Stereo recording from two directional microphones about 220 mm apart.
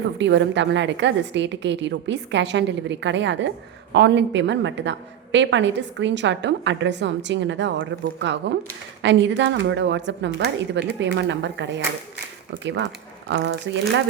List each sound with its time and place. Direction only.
0.2 s a woman's voice: 55° right (ahead or behind)